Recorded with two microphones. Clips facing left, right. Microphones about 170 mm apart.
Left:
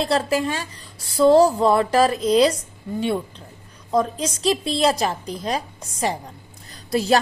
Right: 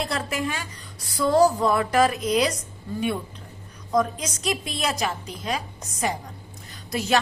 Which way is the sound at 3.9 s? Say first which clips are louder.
Left 2 dB; 30° left (ahead or behind).